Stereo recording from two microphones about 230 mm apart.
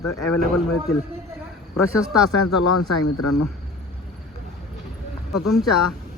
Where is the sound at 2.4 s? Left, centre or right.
Left.